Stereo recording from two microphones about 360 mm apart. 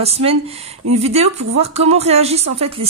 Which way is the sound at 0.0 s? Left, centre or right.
Centre.